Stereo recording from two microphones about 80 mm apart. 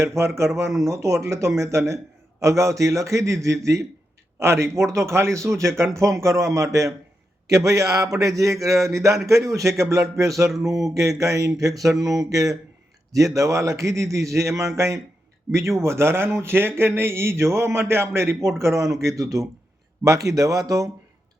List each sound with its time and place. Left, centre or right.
0.0 s a man's voice: right